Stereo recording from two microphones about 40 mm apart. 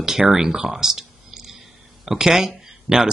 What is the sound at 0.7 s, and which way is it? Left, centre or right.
Clicking, centre.